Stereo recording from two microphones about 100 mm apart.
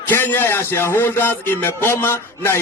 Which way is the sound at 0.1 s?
20° left (ahead or behind).